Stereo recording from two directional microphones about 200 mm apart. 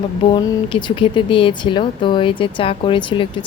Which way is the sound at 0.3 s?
25° left (ahead or behind).